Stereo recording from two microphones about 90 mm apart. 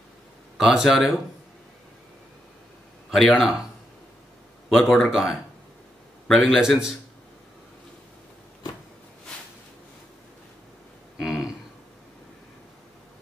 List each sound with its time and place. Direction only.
0.6 s speech: 5° right (ahead or behind)
3.1 s speech: centre (ahead or behind)
4.6 s speech: centre (ahead or behind)